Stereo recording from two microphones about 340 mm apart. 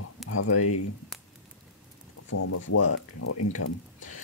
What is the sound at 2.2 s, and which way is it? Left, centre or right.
Speech, left.